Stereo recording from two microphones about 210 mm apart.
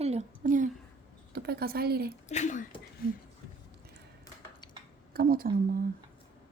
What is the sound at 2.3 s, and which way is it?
Speech, 35° left (ahead or behind).